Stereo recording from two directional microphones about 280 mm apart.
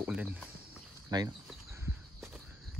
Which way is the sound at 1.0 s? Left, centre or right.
Centre.